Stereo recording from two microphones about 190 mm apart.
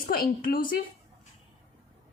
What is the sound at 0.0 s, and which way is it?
Speech, 50° left (ahead or behind).